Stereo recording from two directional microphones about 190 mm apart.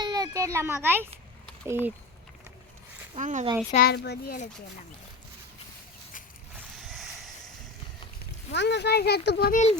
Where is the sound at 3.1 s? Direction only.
40° right (ahead or behind).